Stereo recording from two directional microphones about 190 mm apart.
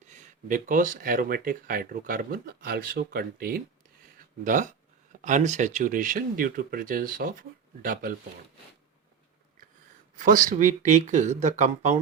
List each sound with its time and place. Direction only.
0.1 s speech: 40° right (ahead or behind)
10.2 s speech: 45° right (ahead or behind)